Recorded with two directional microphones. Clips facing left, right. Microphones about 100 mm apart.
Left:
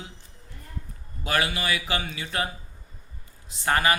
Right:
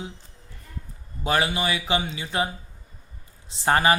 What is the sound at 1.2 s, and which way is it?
A man's voice, 25° right (ahead or behind).